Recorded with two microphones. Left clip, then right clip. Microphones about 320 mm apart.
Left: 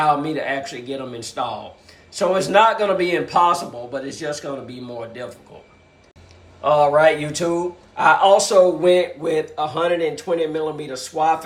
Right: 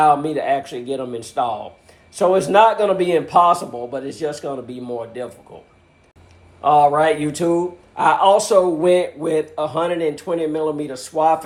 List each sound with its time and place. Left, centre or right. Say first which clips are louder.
0.0 s a man's voice: right 3 dB; centre
6.6 s a man's voice: right 1 dB; centre